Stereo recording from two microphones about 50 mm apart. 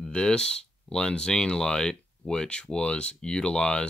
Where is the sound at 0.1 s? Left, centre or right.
Centre.